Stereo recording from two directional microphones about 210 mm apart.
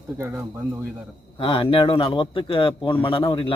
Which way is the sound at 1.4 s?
25° left (ahead or behind).